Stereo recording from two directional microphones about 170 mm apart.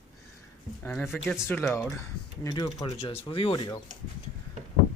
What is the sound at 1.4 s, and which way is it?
Speech, 15° left (ahead or behind).